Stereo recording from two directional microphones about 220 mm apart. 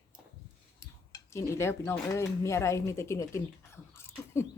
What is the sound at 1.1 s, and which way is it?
Speech, 15° left (ahead or behind).